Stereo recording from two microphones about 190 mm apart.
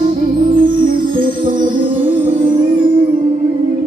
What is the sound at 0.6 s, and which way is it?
Music, 25° right (ahead or behind).